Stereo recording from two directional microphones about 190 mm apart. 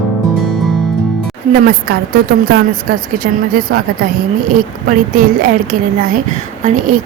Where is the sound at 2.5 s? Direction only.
50° right (ahead or behind).